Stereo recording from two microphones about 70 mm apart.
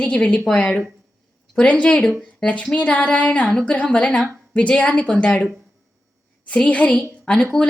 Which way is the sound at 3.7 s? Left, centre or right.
Centre.